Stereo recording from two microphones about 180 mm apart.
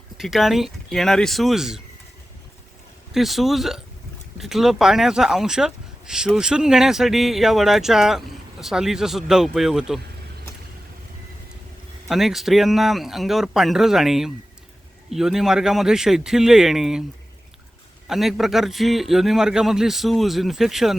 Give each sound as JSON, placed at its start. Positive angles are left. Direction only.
{"t": 0.2, "sound": "speech", "side_deg": 0}
{"t": 3.1, "sound": "speech", "side_deg": 0}
{"t": 12.0, "sound": "speech", "side_deg": 0}
{"t": 18.1, "sound": "speech", "side_deg": 0}